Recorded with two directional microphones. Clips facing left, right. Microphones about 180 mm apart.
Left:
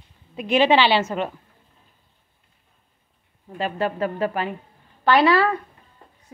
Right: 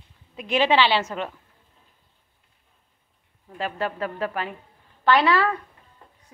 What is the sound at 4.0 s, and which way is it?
A woman's voice, 30° left (ahead or behind).